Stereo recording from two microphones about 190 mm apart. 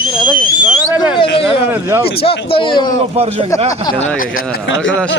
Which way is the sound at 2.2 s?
30° left (ahead or behind).